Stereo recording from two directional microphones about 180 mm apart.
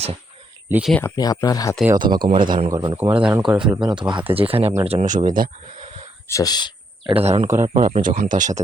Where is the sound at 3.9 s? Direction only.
25° right (ahead or behind); by 5.8 s 45° right (ahead or behind).